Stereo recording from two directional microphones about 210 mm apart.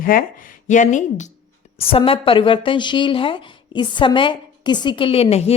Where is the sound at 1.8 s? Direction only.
25° left (ahead or behind).